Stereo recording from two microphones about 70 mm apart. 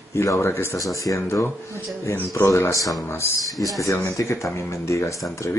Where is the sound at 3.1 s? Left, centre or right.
Left.